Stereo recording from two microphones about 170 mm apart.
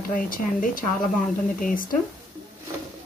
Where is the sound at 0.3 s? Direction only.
55° left (ahead or behind).